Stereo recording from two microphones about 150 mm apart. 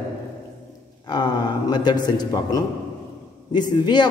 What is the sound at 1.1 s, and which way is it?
A man's voice, 30° left (ahead or behind).